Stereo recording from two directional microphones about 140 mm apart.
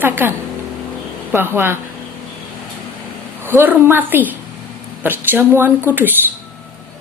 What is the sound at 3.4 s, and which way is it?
Speech, 15° right (ahead or behind).